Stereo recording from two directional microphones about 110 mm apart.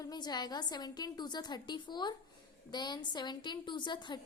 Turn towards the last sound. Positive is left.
turn(degrees=45)  # may be behind; listen again after turning